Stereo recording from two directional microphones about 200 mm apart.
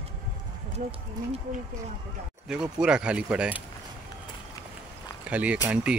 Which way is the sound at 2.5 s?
5° right (ahead or behind).